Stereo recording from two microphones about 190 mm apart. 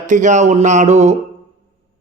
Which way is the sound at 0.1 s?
40° right (ahead or behind).